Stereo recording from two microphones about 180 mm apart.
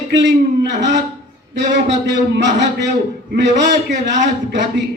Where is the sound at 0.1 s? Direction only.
75° right (ahead or behind).